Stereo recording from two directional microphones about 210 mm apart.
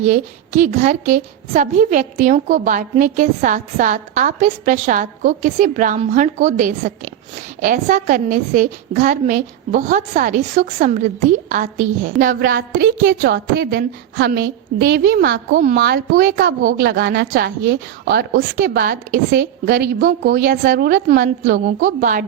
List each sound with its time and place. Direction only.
0.0 s a woman's voice: 35° right (ahead or behind)